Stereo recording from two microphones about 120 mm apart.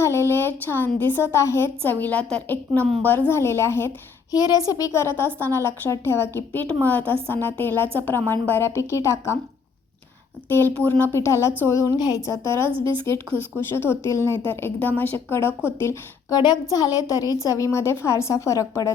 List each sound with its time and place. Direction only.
0.0 s a woman's voice: 20° left (ahead or behind)
4.4 s a woman's voice: 30° left (ahead or behind)
10.5 s a woman's voice: 15° left (ahead or behind)
16.3 s a woman's voice: 35° left (ahead or behind)